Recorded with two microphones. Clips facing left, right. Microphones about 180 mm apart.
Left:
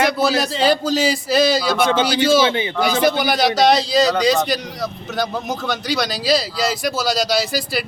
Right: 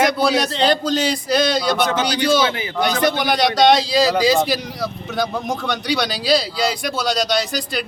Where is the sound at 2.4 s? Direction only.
25° left (ahead or behind).